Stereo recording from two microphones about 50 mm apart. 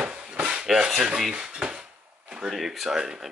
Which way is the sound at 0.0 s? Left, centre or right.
Centre.